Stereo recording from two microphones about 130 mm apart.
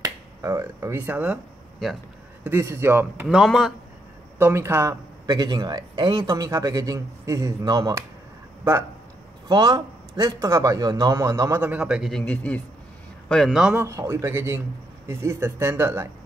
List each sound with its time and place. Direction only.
0.0 s speech: 25° right (ahead or behind)
2.6 s a man's voice: 20° right (ahead or behind)
3.3 s speech: centre (ahead or behind)
4.4 s a man's voice: 20° right (ahead or behind)
5.2 s a man's voice: 35° right (ahead or behind)
9.5 s a man's voice: 30° right (ahead or behind); by 13.7 s centre (ahead or behind)
13.7 s a man's voice: 20° right (ahead or behind)